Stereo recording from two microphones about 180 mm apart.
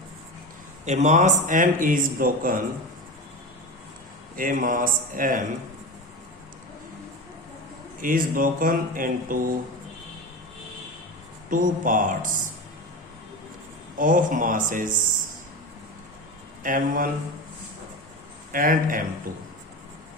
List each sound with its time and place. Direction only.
0.9 s speech: 40° right (ahead or behind)
4.4 s speech: 50° right (ahead or behind)
8.0 s speech: 50° right (ahead or behind)
11.4 s speech: 45° right (ahead or behind)
14.0 s speech: 50° right (ahead or behind)
16.6 s speech: 50° right (ahead or behind)
18.5 s speech: 50° right (ahead or behind)